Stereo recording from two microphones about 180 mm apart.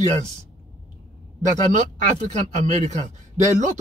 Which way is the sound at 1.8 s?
40° right (ahead or behind).